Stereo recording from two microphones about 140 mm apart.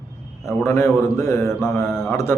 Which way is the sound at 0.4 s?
20° left (ahead or behind).